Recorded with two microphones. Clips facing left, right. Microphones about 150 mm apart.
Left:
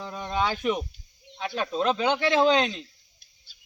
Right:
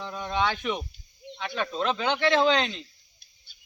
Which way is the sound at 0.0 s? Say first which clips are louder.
Even; 10° left (ahead or behind).